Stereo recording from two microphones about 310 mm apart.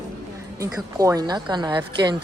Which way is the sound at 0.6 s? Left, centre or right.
Centre.